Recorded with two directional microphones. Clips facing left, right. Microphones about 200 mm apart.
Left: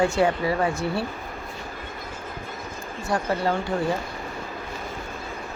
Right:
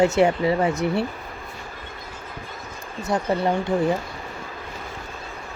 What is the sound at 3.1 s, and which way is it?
Speech, 20° right (ahead or behind).